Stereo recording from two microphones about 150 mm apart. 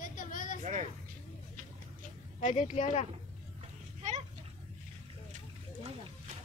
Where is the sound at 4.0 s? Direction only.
50° right (ahead or behind).